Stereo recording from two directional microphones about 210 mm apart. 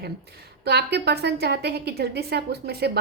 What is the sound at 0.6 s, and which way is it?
A woman's voice, 50° right (ahead or behind).